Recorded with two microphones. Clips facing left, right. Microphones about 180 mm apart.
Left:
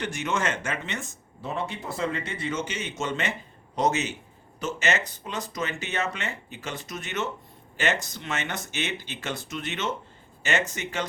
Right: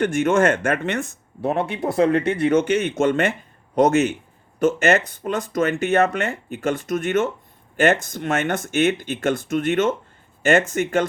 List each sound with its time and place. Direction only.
0.0 s speech: 50° right (ahead or behind)